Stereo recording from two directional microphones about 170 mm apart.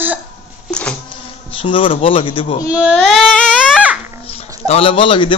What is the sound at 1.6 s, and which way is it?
Speech, 30° left (ahead or behind).